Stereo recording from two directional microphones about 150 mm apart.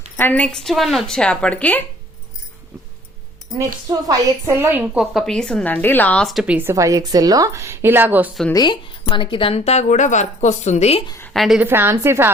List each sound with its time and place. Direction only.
0.2 s speech: 10° left (ahead or behind)
3.6 s a woman's voice: 25° right (ahead or behind)
4.9 s speech: centre (ahead or behind)
6.4 s a woman's voice: 10° right (ahead or behind)
8.5 s a woman's voice: 30° left (ahead or behind)
11.3 s speech: centre (ahead or behind)
11.6 s a woman's voice: 15° right (ahead or behind)